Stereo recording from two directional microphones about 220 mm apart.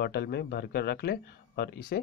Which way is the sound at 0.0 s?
45° left (ahead or behind).